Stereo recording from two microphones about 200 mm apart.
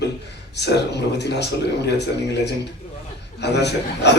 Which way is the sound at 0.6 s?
60° left (ahead or behind).